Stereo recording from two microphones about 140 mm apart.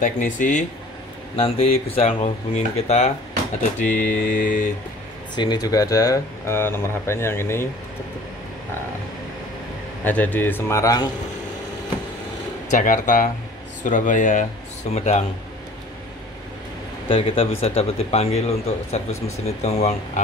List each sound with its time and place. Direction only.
0.0 s speech: 70° left (ahead or behind)
1.3 s speech: 45° left (ahead or behind)
4.0 s speech: 80° left
5.3 s speech: 30° left (ahead or behind)
10.0 s a man's voice: 10° left (ahead or behind)
12.7 s speech: 70° left (ahead or behind)
14.9 s speech: 55° left (ahead or behind)
17.1 s speech: 45° left (ahead or behind)